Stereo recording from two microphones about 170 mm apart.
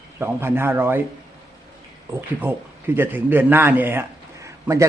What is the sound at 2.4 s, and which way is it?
A man's voice, 10° right (ahead or behind).